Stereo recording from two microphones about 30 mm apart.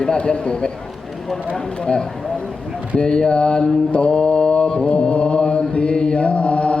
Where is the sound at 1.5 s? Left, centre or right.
Left.